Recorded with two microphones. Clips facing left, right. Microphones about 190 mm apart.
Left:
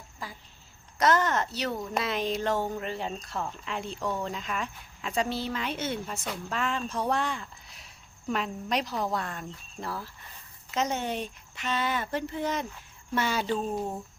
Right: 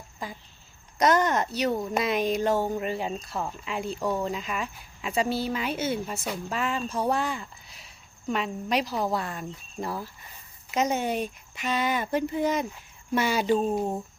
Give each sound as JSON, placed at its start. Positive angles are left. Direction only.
{"t": 0.2, "sound": "speech", "side_deg": -20}